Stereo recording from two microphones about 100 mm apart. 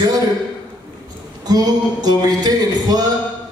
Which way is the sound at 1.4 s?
40° right (ahead or behind).